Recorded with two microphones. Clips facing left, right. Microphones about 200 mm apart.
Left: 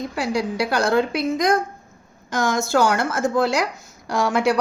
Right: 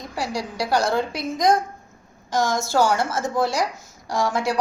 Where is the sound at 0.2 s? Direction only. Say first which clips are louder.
Left 4 dB; 60° left (ahead or behind).